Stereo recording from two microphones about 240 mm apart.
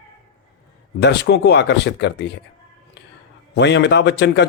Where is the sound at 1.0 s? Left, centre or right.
Left.